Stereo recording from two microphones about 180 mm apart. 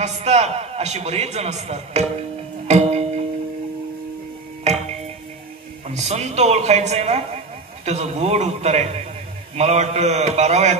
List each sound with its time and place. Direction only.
0.0 s a man's voice: 40° right (ahead or behind)
2.7 s music: 35° right (ahead or behind)
5.9 s a man's voice: 40° right (ahead or behind)